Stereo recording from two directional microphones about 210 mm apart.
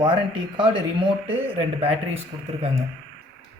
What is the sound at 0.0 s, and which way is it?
Speech, 25° right (ahead or behind).